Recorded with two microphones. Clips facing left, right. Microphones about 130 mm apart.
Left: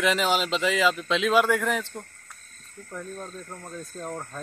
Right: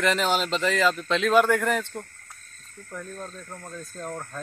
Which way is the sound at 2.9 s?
10° left (ahead or behind).